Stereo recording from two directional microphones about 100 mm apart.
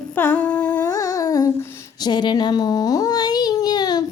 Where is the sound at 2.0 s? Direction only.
45° left (ahead or behind).